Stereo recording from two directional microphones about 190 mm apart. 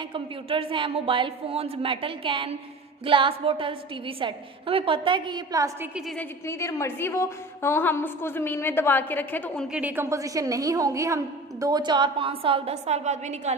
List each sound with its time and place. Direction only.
0.1 s speech: 25° right (ahead or behind)
6.1 s a woman's voice: 15° left (ahead or behind)
9.7 s a woman's voice: 10° right (ahead or behind); by 13.5 s 35° right (ahead or behind)